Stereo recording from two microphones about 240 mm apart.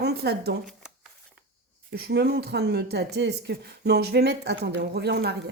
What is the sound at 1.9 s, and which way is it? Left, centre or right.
A woman's voice, right.